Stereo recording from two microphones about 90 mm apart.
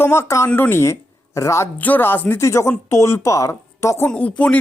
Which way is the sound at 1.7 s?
20° left (ahead or behind).